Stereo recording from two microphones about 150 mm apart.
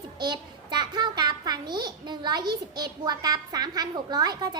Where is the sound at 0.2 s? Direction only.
30° right (ahead or behind).